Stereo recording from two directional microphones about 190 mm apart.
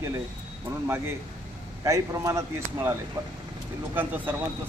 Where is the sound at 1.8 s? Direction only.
15° right (ahead or behind).